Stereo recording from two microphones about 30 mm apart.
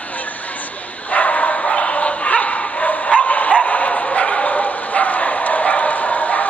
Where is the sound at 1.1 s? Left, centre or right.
Left.